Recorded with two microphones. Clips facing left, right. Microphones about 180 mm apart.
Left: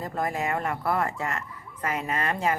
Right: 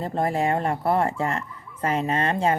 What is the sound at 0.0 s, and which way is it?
Speech, 30° right (ahead or behind).